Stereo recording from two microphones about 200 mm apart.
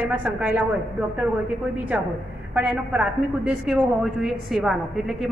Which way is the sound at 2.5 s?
5° right (ahead or behind).